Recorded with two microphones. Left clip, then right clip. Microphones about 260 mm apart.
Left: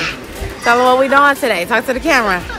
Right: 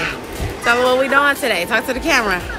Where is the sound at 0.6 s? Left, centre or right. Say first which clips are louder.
Left 4 dB; centre.